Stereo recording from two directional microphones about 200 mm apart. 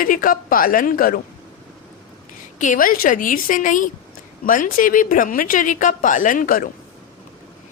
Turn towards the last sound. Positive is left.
turn(degrees=45)  # may be behind; listen again after turning